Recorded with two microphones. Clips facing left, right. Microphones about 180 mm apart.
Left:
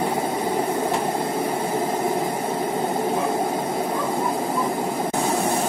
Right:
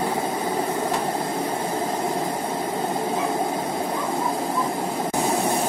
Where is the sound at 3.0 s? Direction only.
10° left (ahead or behind).